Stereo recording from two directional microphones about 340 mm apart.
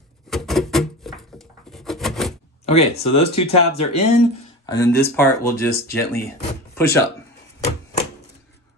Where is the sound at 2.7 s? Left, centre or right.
Centre.